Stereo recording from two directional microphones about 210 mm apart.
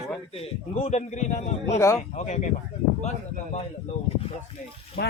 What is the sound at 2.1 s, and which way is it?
Speech, 35° left (ahead or behind).